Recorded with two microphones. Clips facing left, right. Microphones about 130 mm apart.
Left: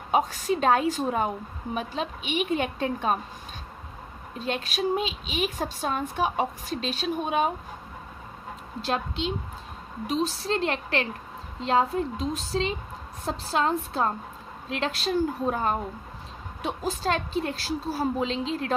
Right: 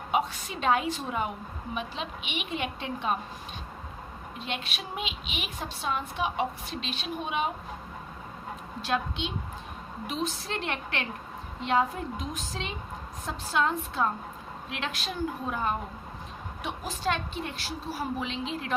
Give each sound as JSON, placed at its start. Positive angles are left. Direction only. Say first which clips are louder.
{"t": 0.1, "sound": "a woman's voice", "louder": "left 5 dB", "side_deg": 40}
{"t": 4.4, "sound": "speech", "louder": "left 8 dB", "side_deg": 40}
{"t": 8.8, "sound": "speech", "louder": "left 2 dB", "side_deg": 30}